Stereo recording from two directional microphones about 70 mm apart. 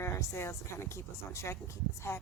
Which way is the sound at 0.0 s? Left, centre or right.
Left.